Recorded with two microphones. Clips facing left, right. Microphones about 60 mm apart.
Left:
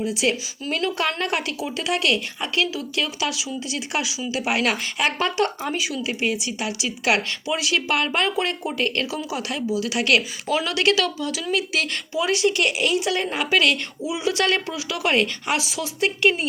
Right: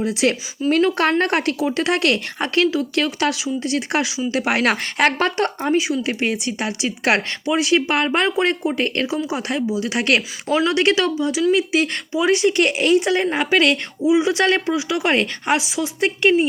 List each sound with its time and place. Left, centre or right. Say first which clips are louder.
0.0 s speech: right 4 dB; right
0.7 s a woman's voice: right 7 dB; right
6.1 s speech: right 3 dB; right